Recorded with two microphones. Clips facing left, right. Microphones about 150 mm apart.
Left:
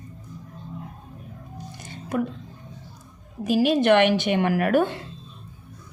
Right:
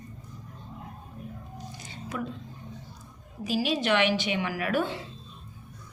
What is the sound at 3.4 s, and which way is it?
A woman's voice, 55° left (ahead or behind).